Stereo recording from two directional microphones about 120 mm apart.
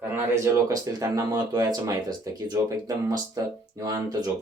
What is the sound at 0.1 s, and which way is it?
Speech, 25° right (ahead or behind).